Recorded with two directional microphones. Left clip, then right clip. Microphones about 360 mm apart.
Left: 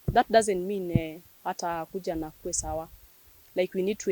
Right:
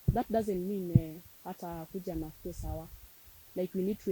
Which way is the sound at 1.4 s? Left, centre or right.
Centre.